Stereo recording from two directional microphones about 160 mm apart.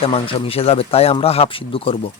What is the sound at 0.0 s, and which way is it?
A man's voice, 35° left (ahead or behind).